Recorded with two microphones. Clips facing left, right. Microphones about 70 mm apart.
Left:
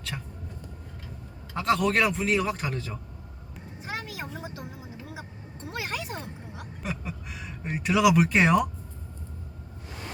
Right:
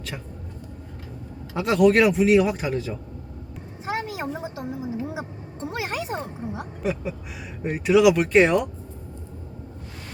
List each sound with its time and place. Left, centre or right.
1.5 s speech: centre
3.8 s a sound: right
6.8 s speech: centre